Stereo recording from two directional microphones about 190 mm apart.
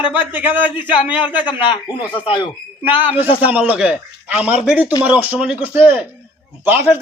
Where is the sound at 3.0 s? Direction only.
10° right (ahead or behind).